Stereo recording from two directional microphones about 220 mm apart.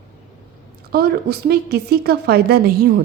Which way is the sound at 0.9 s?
45° right (ahead or behind).